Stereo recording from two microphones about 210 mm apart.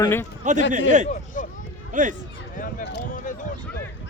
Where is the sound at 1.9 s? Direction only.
40° right (ahead or behind).